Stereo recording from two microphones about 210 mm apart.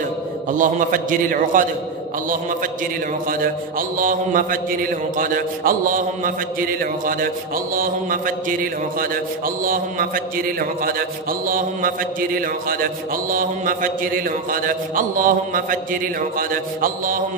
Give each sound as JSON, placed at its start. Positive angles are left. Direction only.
{"t": 0.5, "sound": "a man's voice", "side_deg": -40}
{"t": 3.3, "sound": "a man's voice", "side_deg": -40}
{"t": 9.7, "sound": "a man's voice", "side_deg": -45}